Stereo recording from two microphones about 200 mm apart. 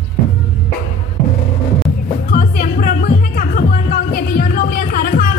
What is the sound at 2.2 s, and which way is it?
Music, 45° left (ahead or behind).